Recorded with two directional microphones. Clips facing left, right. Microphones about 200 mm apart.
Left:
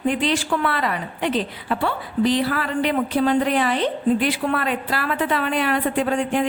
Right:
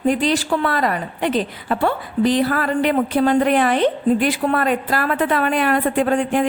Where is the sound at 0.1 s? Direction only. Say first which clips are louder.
Right 4 dB; 40° right (ahead or behind).